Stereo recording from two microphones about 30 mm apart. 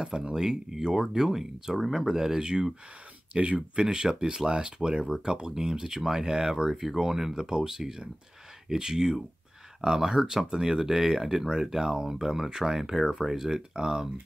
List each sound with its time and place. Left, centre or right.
0.0 s speech: right
3.3 s speech: right
5.0 s speech: centre